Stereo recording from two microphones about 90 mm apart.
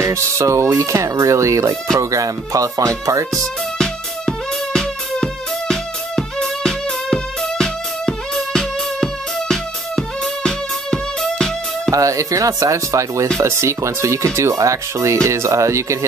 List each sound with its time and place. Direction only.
0.0 s speech: 35° right (ahead or behind)
3.3 s music: 5° left (ahead or behind)
11.9 s speech: 35° right (ahead or behind)